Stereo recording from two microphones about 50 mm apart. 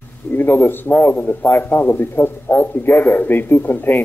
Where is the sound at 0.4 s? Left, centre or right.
Left.